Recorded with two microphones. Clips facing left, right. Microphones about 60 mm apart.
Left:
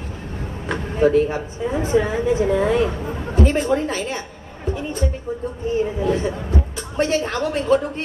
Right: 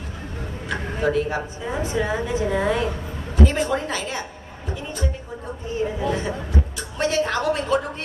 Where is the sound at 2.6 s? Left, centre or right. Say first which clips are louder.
Left 4 dB; left.